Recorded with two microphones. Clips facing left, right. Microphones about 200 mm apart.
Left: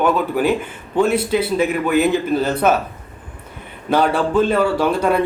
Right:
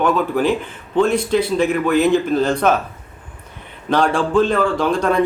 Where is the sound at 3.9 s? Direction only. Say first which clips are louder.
Even; 5° left (ahead or behind).